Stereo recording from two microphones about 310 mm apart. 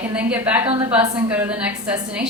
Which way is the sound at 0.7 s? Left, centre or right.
Centre.